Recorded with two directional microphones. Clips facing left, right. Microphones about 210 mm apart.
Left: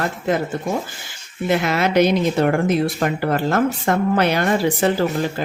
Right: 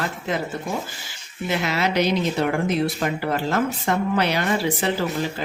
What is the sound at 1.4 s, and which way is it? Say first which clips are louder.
Speech: left 5 dB; 50° left (ahead or behind).